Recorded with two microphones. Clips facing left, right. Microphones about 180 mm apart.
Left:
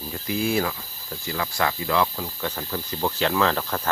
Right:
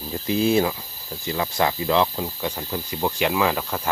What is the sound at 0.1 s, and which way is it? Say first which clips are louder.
Speech: right 5 dB; 25° right (ahead or behind).